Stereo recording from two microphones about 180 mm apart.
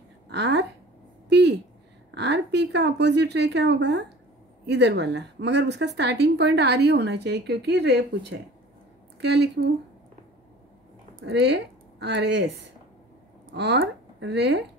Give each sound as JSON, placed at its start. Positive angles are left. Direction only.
{"t": 0.3, "sound": "speech", "side_deg": -70}
{"t": 1.3, "sound": "a sound", "side_deg": -70}
{"t": 2.0, "sound": "a woman's voice", "side_deg": -70}
{"t": 11.2, "sound": "speech", "side_deg": -70}